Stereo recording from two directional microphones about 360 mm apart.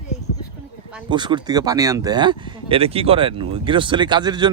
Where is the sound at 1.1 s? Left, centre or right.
Centre.